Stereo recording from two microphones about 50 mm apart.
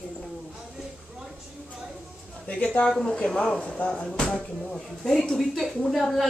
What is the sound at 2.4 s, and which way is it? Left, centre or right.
Speech, left.